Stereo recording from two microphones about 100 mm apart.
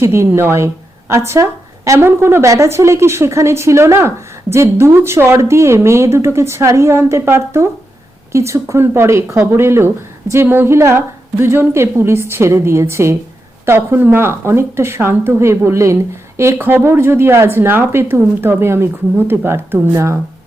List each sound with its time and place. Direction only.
0.0 s speech: 25° right (ahead or behind)